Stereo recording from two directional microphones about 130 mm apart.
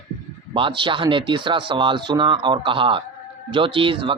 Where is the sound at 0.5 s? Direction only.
40° right (ahead or behind).